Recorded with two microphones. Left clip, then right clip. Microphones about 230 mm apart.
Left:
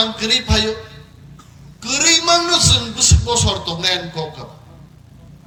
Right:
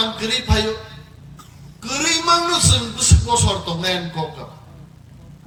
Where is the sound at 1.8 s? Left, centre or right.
Centre.